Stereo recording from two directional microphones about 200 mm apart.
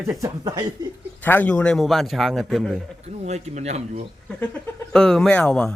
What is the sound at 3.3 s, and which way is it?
Speech, 35° right (ahead or behind).